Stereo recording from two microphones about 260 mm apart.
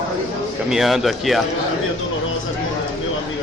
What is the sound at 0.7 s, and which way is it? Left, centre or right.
Speech, centre.